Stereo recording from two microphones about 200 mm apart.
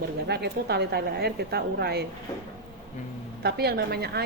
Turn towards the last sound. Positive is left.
turn(degrees=-50)  # may be behind; listen again after turning